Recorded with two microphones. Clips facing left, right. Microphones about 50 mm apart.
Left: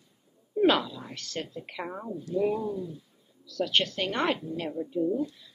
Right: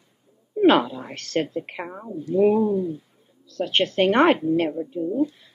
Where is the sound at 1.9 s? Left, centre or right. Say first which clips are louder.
Right 6 dB; centre; by 4.8 s right.